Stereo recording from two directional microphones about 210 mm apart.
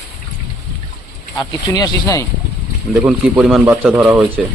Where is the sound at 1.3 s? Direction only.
15° left (ahead or behind).